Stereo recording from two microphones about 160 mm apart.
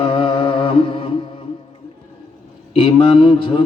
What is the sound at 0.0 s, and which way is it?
Music, 30° left (ahead or behind).